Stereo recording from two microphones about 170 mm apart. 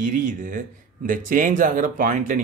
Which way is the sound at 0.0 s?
50° right (ahead or behind).